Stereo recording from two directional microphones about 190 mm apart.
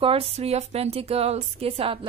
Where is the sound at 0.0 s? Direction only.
30° right (ahead or behind).